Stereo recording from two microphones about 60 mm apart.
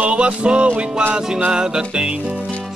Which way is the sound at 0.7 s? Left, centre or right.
Right.